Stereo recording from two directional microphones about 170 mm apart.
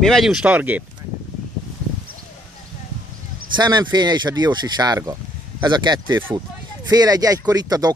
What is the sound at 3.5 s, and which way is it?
Speech, 25° right (ahead or behind).